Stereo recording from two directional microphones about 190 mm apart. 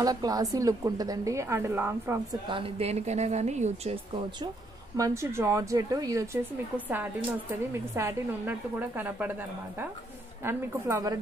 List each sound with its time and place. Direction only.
0.0 s speech: 20° right (ahead or behind)
2.4 s a woman's voice: 30° right (ahead or behind)
4.9 s speech: 15° right (ahead or behind)
7.7 s speech: 15° right (ahead or behind)